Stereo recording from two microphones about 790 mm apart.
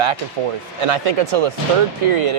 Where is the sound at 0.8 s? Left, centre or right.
Right.